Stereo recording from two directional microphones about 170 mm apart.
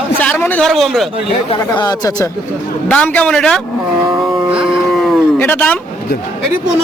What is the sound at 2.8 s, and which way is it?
Speech, 10° left (ahead or behind).